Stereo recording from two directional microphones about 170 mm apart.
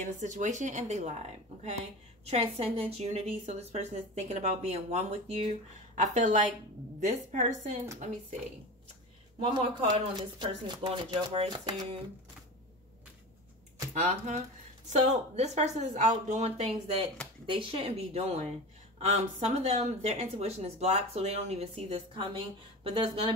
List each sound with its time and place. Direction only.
0.0 s speech: 45° right (ahead or behind)
2.2 s speech: 40° right (ahead or behind)
9.4 s speech: 30° right (ahead or behind)
13.9 s speech: 45° right (ahead or behind)